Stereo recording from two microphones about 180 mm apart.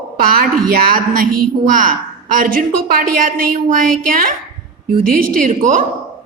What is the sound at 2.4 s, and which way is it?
A woman's voice, 55° right (ahead or behind).